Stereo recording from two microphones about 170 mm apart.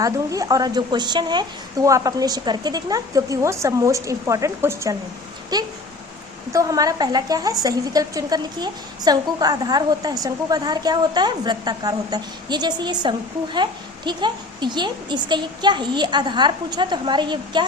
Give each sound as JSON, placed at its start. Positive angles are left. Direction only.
{"t": 0.0, "sound": "a woman's voice", "side_deg": -20}